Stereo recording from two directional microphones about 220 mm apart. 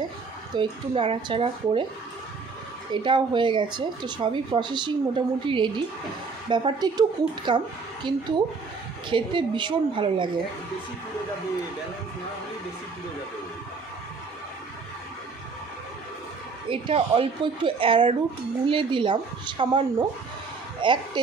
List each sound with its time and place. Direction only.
0.6 s speech: 25° right (ahead or behind)
2.9 s speech: 20° right (ahead or behind)
9.1 s speech: 20° right (ahead or behind)
16.6 s speech: 25° right (ahead or behind)